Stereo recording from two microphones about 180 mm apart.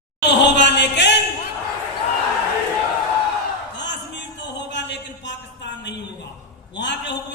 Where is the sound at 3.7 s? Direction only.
80° left.